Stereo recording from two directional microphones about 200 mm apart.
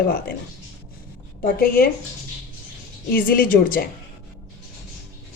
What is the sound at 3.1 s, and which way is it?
Speech, 45° left (ahead or behind).